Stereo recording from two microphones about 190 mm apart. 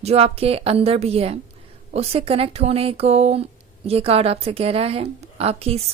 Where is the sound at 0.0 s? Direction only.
35° right (ahead or behind).